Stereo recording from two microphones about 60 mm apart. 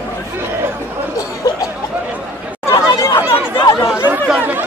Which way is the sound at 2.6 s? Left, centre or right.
Left.